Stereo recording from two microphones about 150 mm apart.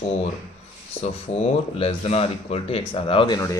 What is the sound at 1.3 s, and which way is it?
Speech, 40° left (ahead or behind).